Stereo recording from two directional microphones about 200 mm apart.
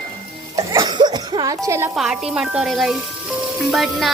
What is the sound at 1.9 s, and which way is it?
Music, centre (ahead or behind).